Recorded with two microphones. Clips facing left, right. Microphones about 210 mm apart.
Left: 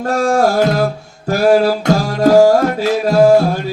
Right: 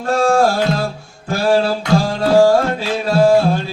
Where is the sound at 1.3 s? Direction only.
30° right (ahead or behind).